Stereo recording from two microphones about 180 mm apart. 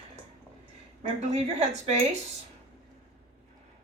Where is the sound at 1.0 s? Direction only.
35° right (ahead or behind).